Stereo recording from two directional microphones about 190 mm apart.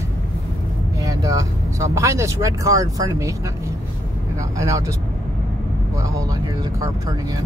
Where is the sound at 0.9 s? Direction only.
20° right (ahead or behind).